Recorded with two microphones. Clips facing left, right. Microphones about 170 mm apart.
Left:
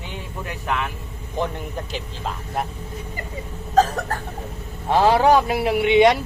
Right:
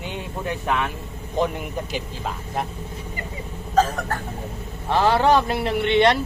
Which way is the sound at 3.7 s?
35° left (ahead or behind).